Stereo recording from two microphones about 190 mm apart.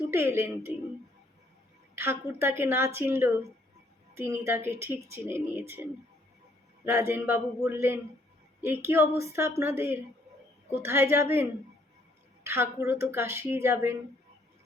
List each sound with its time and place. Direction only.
0.1 s a woman's voice: 15° right (ahead or behind)
2.0 s a woman's voice: 10° right (ahead or behind)